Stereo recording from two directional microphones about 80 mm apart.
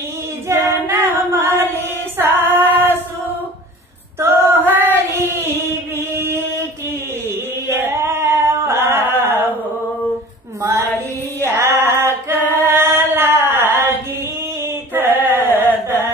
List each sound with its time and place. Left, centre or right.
0.5 s female singing: right
4.2 s female singing: right
7.7 s singing: right
11.4 s female singing: right
15.0 s a sound: right